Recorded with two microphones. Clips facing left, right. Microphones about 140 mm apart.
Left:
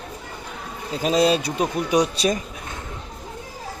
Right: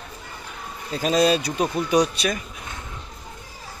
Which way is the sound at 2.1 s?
35° left (ahead or behind).